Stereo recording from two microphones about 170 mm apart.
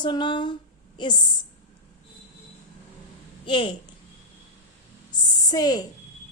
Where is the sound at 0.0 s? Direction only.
25° left (ahead or behind).